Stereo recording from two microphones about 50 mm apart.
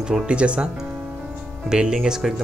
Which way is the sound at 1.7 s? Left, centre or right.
Centre.